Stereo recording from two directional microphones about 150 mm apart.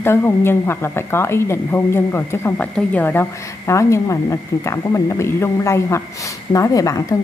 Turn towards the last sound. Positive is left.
turn(degrees=20)  # may be behind; listen again after turning